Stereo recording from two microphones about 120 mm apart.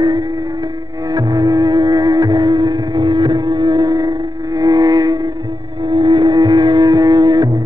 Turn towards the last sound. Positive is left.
turn(degrees=-35)  # may be behind; listen again after turning